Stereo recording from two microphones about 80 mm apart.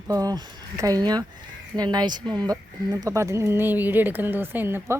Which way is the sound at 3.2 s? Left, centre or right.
Right.